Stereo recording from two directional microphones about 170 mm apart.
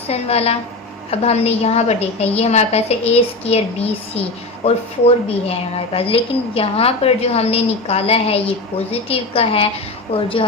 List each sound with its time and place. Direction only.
0.1 s a woman's voice: 35° left (ahead or behind)